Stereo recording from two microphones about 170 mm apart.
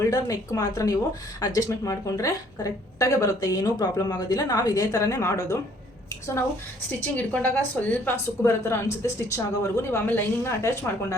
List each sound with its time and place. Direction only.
0.0 s a woman's voice: 20° left (ahead or behind)
7.3 s a woman's voice: 10° left (ahead or behind)